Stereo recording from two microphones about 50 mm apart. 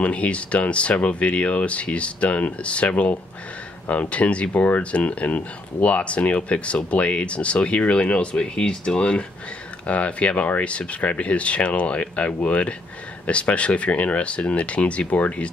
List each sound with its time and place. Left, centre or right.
0.0 s speech: left